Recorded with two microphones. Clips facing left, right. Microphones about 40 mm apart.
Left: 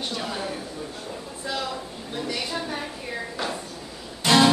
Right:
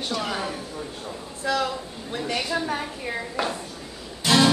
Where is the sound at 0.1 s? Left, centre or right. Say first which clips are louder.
Right 3 dB; right.